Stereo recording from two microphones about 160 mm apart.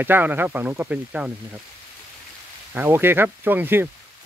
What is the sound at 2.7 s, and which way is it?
Speech, 15° right (ahead or behind).